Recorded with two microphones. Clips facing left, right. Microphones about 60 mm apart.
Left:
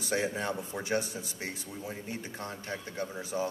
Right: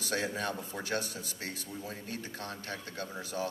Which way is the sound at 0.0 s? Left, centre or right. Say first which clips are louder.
Left 2 dB; centre.